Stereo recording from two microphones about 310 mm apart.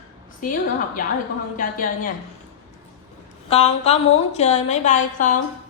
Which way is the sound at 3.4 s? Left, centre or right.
Centre.